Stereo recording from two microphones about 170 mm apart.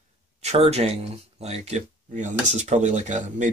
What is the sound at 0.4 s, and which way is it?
Speech, 40° right (ahead or behind).